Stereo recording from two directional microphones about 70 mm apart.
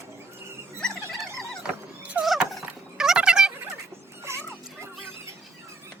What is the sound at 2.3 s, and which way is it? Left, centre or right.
Turkey, centre.